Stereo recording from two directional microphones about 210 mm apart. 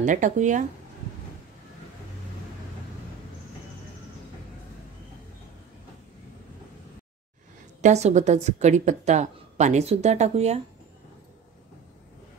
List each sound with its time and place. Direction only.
0.0 s a woman's voice: 35° right (ahead or behind)
7.8 s a woman's voice: 35° right (ahead or behind)